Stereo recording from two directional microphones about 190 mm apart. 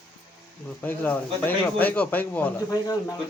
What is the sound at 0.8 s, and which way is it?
Speech, 10° left (ahead or behind).